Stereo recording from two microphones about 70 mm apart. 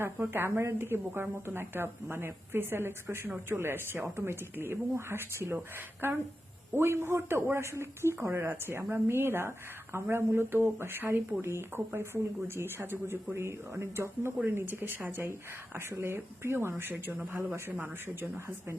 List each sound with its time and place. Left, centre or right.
0.0 s speech: right
3.2 s speech: right
3.6 s speech: right
16.9 s speech: right